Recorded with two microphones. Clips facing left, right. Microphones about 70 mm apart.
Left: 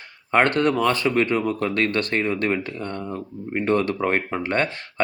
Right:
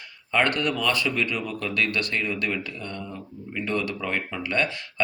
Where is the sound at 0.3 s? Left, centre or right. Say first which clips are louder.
Left 5 dB; left.